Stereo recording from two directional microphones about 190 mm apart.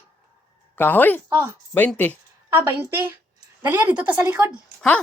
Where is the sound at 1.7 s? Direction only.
10° left (ahead or behind).